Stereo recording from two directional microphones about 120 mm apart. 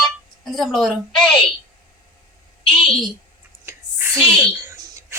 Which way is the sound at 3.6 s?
20° right (ahead or behind).